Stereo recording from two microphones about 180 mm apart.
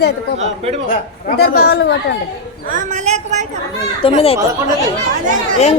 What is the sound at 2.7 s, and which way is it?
Speech, 45° right (ahead or behind).